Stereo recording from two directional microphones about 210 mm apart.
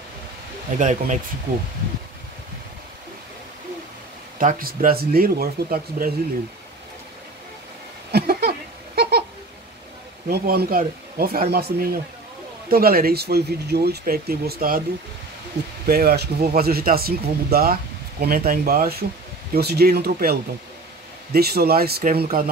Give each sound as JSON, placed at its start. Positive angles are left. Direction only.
{"t": 0.7, "sound": "speech", "side_deg": -35}
{"t": 4.4, "sound": "speech", "side_deg": -40}
{"t": 8.1, "sound": "a sound", "side_deg": -50}
{"t": 10.3, "sound": "speech", "side_deg": -45}
{"t": 15.9, "sound": "speech", "side_deg": -45}